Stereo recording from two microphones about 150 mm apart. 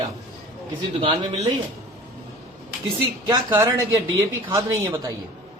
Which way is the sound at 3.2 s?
25° right (ahead or behind).